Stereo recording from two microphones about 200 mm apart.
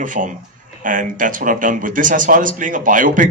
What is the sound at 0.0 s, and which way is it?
A man's voice, 40° right (ahead or behind).